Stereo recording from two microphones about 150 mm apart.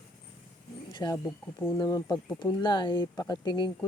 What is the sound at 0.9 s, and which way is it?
Speech, 25° left (ahead or behind).